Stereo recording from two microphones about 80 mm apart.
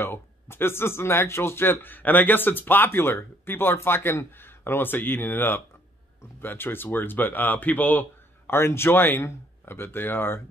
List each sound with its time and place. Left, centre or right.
0.0 s speech: left